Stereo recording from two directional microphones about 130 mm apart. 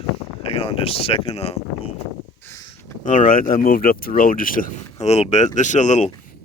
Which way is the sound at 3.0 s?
90° left.